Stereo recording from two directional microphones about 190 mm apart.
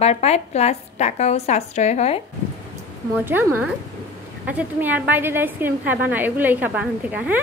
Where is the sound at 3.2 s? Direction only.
10° right (ahead or behind).